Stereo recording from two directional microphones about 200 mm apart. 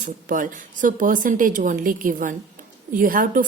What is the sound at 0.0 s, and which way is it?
A woman's voice, 40° right (ahead or behind).